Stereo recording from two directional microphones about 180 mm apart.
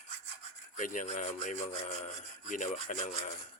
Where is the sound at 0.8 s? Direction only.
40° left (ahead or behind).